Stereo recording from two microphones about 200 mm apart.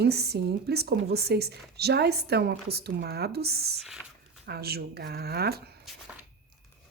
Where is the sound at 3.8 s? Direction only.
Centre (ahead or behind).